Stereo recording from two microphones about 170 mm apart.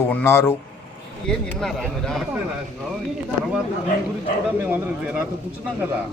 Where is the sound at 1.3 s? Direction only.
5° left (ahead or behind).